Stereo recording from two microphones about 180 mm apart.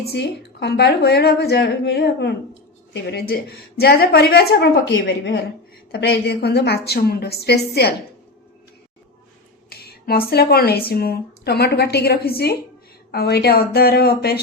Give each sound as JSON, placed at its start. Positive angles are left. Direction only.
{"t": 0.0, "sound": "speech", "side_deg": 70}
{"t": 9.6, "sound": "speech", "side_deg": 60}